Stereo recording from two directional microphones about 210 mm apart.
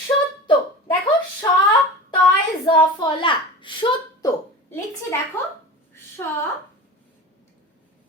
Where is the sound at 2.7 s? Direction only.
25° left (ahead or behind).